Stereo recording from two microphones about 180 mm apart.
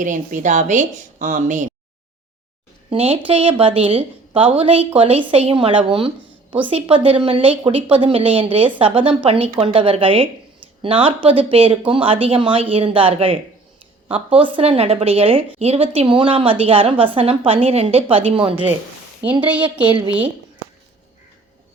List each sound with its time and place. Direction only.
0.0 s a woman's voice: 45° right (ahead or behind)
2.9 s a woman's voice: 30° right (ahead or behind)
19.4 s a woman's voice: 10° right (ahead or behind)